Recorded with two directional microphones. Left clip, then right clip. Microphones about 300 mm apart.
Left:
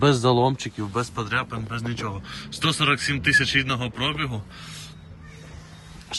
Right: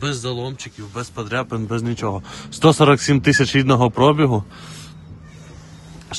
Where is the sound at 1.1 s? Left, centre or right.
Centre.